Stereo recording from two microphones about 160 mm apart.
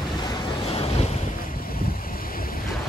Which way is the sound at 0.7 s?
35° left (ahead or behind).